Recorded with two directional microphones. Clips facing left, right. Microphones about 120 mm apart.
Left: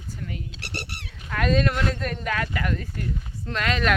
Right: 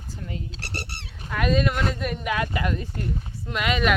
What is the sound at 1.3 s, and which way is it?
Speech, 5° right (ahead or behind).